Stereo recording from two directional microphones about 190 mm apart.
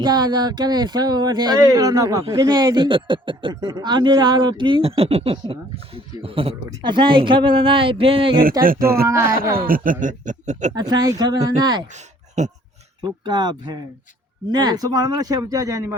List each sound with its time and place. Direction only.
0.0 s speech: 20° right (ahead or behind)
8.6 s speech: 50° right (ahead or behind)
9.0 s speech: 15° right (ahead or behind)
9.6 s speech: 45° right (ahead or behind)
10.8 s speech: 20° right (ahead or behind)
11.9 s a sound: 40° right (ahead or behind)
13.0 s speech: 25° right (ahead or behind)